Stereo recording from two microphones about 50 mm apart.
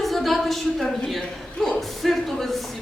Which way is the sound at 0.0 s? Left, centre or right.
Centre.